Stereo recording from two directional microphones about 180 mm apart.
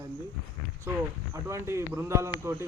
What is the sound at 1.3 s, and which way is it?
Speech, 15° right (ahead or behind).